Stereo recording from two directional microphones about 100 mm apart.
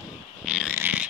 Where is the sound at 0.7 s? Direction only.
15° right (ahead or behind).